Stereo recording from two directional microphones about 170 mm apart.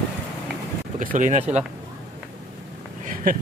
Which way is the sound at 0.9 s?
50° right (ahead or behind).